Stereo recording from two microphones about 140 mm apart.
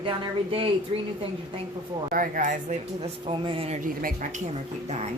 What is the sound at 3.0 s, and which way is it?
Speech, 40° right (ahead or behind).